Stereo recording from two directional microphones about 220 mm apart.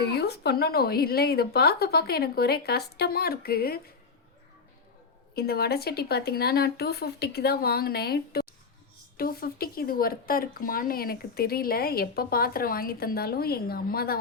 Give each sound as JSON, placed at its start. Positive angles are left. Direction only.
{"t": 0.1, "sound": "speech", "side_deg": 45}
{"t": 5.3, "sound": "speech", "side_deg": 45}